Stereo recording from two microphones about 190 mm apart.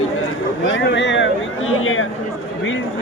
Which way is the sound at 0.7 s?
70° left (ahead or behind).